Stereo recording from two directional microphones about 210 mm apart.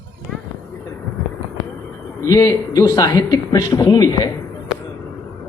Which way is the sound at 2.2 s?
15° left (ahead or behind).